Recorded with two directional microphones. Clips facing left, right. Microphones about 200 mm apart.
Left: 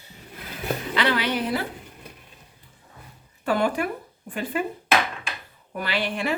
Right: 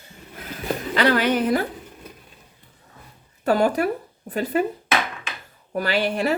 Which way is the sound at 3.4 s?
40° right (ahead or behind).